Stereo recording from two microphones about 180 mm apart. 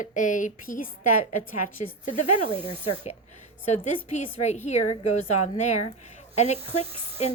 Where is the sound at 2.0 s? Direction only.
40° left (ahead or behind).